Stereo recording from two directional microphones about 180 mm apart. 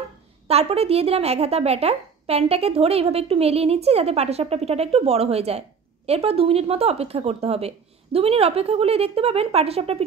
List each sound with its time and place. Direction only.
0.5 s a woman's voice: 35° right (ahead or behind)